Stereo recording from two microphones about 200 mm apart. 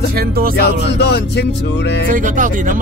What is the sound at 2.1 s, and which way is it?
Speech, 40° right (ahead or behind).